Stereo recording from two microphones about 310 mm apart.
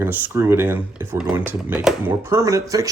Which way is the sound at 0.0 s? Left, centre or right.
Centre.